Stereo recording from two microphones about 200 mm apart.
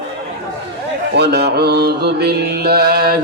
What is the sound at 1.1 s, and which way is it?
Mantra, 55° right (ahead or behind).